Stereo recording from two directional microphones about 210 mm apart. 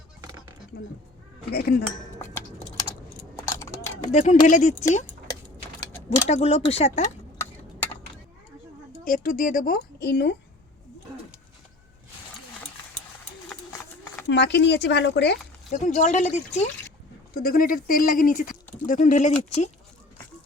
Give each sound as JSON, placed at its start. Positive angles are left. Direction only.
{"t": 1.5, "sound": "speech", "side_deg": 45}
{"t": 2.1, "sound": "a sound", "side_deg": 10}
{"t": 3.4, "sound": "a sound", "side_deg": 15}
{"t": 4.1, "sound": "speech", "side_deg": 35}
{"t": 6.2, "sound": "speech", "side_deg": 30}
{"t": 9.0, "sound": "speech", "side_deg": 40}
{"t": 14.3, "sound": "speech", "side_deg": 55}
{"t": 15.7, "sound": "speech", "side_deg": 35}
{"t": 17.3, "sound": "speech", "side_deg": 45}